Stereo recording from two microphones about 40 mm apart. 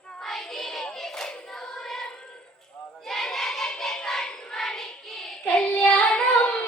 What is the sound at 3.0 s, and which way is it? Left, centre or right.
Child singing, centre.